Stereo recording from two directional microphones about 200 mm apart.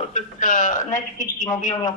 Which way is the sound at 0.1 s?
40° left (ahead or behind).